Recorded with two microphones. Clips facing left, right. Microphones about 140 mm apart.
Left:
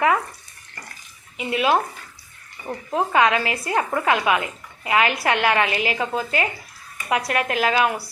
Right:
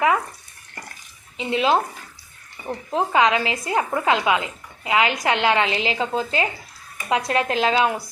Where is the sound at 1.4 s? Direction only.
25° right (ahead or behind).